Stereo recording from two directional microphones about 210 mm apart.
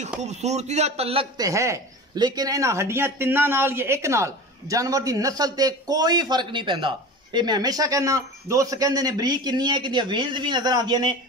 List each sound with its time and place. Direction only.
0.0 s speech: 35° right (ahead or behind)
1.4 s speech: 15° right (ahead or behind)